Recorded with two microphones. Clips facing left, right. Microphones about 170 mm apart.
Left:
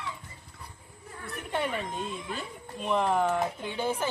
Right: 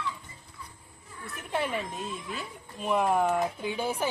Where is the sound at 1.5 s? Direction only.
Centre (ahead or behind).